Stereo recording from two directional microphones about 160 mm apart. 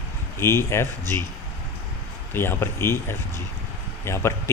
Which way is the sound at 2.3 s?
15° left (ahead or behind).